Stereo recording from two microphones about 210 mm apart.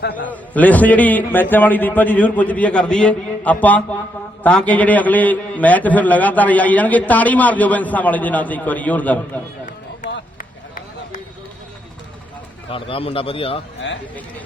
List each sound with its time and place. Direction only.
0.3 s a man's voice: 5° left (ahead or behind)
12.7 s a man's voice: 25° left (ahead or behind)